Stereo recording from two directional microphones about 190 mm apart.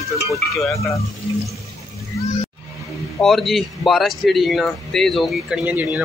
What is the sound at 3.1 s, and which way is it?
Speech, centre (ahead or behind).